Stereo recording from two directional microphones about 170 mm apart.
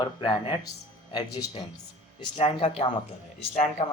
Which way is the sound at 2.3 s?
35° left (ahead or behind).